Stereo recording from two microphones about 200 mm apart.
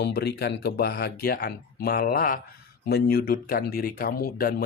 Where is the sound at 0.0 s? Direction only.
55° left (ahead or behind).